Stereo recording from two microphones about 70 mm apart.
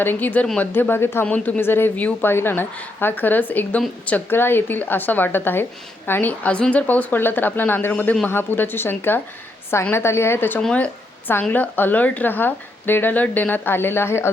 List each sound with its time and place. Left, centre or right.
0.0 s a woman's voice: left
4.3 s a woman's voice: left
10.6 s a woman's voice: centre; by 14.3 s left